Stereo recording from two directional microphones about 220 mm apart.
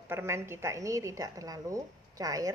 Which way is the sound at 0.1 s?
10° right (ahead or behind).